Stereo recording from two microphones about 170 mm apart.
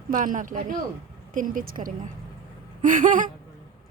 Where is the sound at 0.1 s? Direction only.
50° right (ahead or behind).